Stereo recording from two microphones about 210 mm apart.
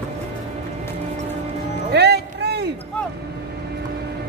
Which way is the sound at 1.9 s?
50° right (ahead or behind).